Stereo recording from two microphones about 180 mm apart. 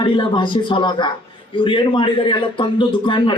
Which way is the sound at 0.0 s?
25° left (ahead or behind).